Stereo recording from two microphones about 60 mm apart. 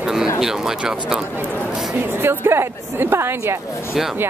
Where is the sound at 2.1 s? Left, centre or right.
Right.